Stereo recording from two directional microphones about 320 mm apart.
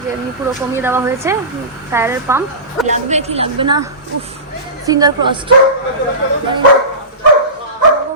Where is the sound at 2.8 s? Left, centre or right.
Right.